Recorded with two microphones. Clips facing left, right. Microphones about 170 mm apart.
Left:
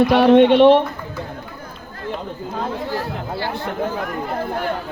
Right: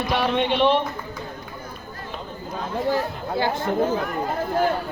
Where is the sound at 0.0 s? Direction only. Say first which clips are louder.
Left 11 dB; 60° left (ahead or behind).